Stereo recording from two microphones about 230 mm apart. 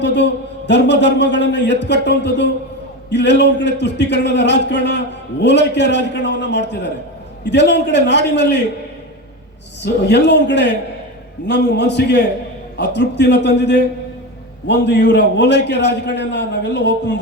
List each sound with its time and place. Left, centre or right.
0.0 s a man's voice: left
9.8 s a man's voice: left